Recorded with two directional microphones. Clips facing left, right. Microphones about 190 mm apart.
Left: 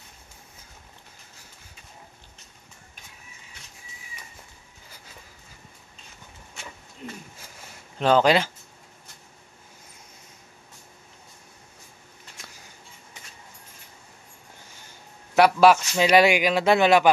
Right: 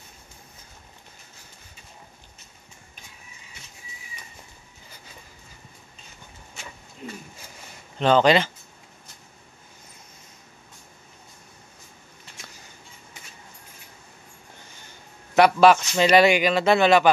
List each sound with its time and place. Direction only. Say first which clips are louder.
8.0 s speech: right 1 dB; 5° left (ahead or behind)
15.3 s speech: right 1 dB; 10° left (ahead or behind)